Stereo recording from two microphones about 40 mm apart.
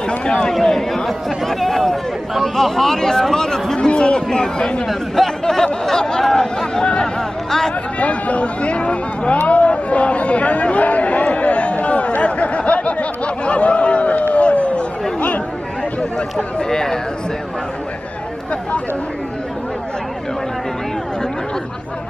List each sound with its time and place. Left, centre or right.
0.1 s a man's voice: left
0.5 s speech: centre
3.7 s speech: left
4.8 s speech: centre
5.4 s a sound: centre
6.3 s chatter: centre
8.0 s a sound: left
9.4 s chatter: left
16.0 s speech: left
16.6 s speech: centre